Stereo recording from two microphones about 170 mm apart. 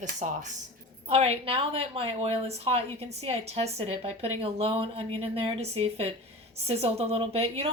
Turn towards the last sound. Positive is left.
turn(degrees=-35)  # may be behind; listen again after turning